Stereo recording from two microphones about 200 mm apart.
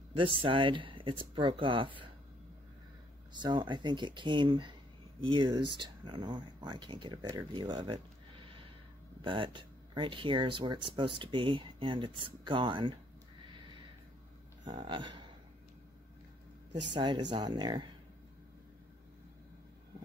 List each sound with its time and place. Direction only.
0.1 s speech: 25° right (ahead or behind)
3.3 s speech: 20° right (ahead or behind)
14.6 s a sound: 25° right (ahead or behind)
16.9 s speech: 25° right (ahead or behind)